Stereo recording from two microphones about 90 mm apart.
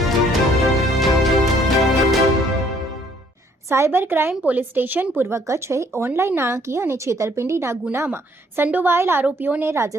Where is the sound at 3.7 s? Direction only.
25° right (ahead or behind).